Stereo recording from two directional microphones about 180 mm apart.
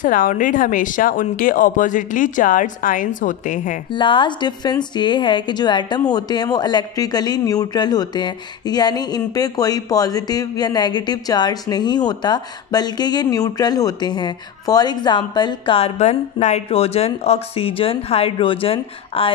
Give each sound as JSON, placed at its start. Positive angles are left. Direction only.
{"t": 0.0, "sound": "speech", "side_deg": 50}
{"t": 3.9, "sound": "a woman's voice", "side_deg": 25}